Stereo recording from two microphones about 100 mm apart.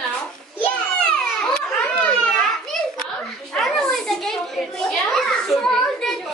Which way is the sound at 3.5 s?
5° left (ahead or behind).